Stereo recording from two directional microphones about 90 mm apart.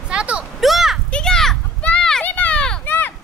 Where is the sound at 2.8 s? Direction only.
20° left (ahead or behind).